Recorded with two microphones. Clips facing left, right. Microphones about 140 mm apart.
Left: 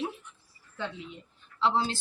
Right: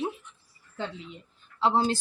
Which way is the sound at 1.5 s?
45° right (ahead or behind).